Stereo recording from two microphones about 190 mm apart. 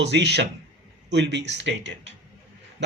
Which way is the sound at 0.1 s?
65° right (ahead or behind).